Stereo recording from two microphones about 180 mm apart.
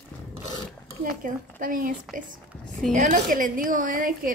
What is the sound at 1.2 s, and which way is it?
A woman's voice, 50° right (ahead or behind).